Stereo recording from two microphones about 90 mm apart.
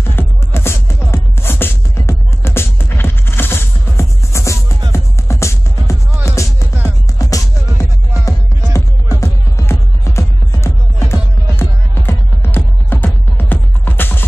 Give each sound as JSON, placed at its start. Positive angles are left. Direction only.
{"t": 0.0, "sound": "music", "side_deg": 25}